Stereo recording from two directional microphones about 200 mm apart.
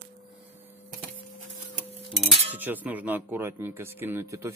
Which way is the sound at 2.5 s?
10° right (ahead or behind).